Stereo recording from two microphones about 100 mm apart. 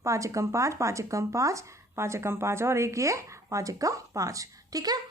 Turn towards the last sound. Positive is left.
turn(degrees=-40)  # may be behind; listen again after turning